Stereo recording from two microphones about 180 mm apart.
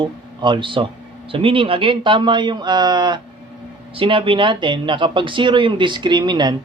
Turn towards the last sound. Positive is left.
turn(degrees=-25)  # may be behind; listen again after turning